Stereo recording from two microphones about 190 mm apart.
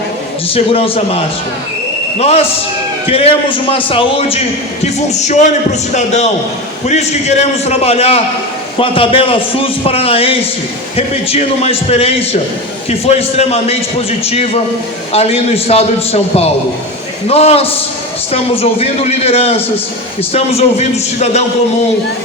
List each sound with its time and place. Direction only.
0.5 s a man's voice: 30° left (ahead or behind)